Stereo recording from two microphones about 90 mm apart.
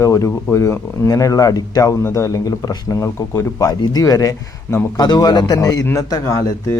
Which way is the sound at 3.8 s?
45° left (ahead or behind).